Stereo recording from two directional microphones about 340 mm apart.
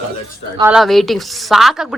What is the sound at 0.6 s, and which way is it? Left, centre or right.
A woman's voice, centre.